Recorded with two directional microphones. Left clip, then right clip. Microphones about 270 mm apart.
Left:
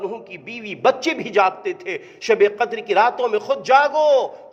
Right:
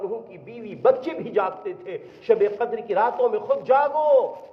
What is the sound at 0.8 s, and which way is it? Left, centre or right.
A man's voice, left.